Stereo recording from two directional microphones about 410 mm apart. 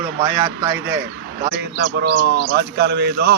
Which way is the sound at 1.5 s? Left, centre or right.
Right.